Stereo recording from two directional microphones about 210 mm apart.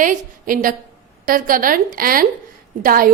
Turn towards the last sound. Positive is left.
turn(degrees=-40)  # may be behind; listen again after turning